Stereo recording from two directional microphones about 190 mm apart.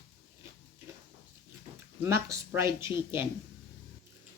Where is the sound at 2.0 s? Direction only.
15° right (ahead or behind).